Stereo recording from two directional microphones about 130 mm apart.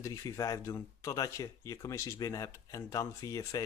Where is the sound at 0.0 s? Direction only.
25° left (ahead or behind).